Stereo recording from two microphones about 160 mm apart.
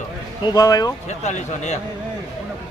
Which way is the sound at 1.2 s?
45° left (ahead or behind).